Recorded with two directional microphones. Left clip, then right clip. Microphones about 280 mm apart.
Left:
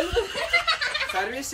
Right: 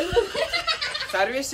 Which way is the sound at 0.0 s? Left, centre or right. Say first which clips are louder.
Right 3 dB; centre.